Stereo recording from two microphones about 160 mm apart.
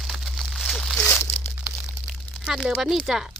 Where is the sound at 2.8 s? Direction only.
Centre (ahead or behind).